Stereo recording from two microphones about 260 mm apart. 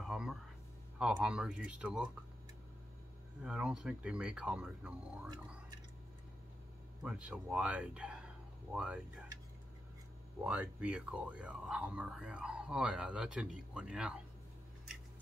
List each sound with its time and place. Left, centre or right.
0.0 s a sound: centre
0.9 s speech: centre
3.4 s speech: centre
7.0 s speech: centre
10.4 s speech: centre